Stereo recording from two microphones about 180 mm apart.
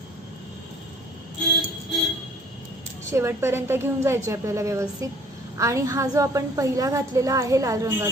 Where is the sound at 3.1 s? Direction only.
15° right (ahead or behind).